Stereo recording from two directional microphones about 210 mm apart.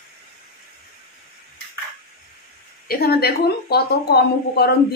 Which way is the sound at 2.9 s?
45° left (ahead or behind).